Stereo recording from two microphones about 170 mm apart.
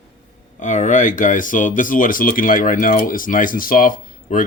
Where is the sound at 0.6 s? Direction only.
45° left (ahead or behind).